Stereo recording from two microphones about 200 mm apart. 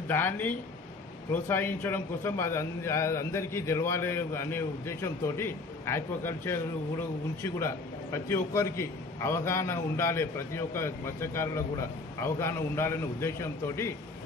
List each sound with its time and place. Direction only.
0.1 s a man's voice: 10° left (ahead or behind)